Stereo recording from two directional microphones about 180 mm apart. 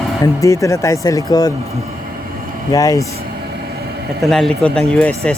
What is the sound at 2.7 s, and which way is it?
Speech, 20° left (ahead or behind).